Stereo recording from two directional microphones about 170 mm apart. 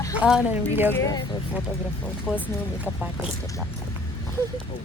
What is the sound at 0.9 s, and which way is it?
Speech, 20° left (ahead or behind).